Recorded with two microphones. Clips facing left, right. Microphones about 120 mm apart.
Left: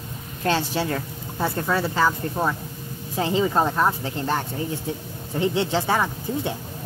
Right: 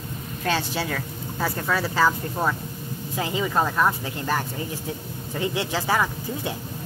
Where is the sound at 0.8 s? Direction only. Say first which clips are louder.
Left 2 dB; 25° left (ahead or behind).